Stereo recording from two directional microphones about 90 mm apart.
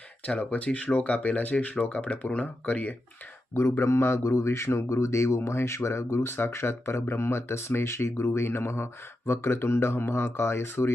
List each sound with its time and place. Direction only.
0.3 s speech: 15° left (ahead or behind)
3.5 s a man's voice: 30° left (ahead or behind)